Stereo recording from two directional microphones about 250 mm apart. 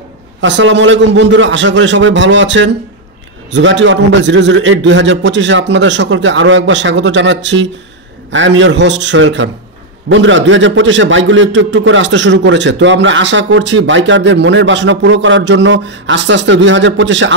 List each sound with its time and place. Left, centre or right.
0.4 s a man's voice: right